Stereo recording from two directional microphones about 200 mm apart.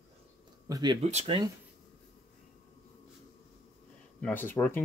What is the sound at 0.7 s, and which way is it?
Speech, 20° right (ahead or behind).